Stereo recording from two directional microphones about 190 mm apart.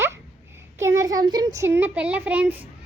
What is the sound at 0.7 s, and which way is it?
A child's voice, 15° right (ahead or behind).